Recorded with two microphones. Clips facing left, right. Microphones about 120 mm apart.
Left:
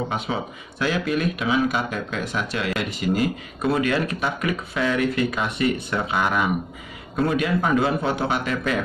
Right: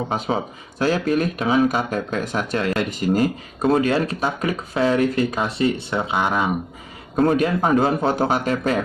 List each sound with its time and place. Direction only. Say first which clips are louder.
0.1 s speech: right 4 dB; 40° right (ahead or behind)
7.2 s speech: right 4 dB; 40° right (ahead or behind)